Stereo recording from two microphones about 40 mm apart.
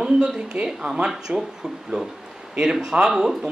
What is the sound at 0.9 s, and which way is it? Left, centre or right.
Speech, right.